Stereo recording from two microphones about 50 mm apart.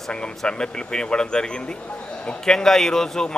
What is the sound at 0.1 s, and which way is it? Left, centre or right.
Speech, centre.